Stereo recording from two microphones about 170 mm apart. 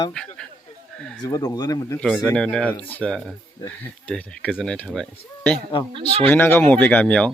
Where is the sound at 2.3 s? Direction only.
5° left (ahead or behind).